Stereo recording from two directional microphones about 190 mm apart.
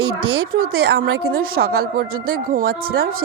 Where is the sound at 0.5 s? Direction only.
55° right (ahead or behind).